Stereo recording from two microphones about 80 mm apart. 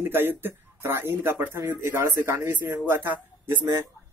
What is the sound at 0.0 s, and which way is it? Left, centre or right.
Speech, right.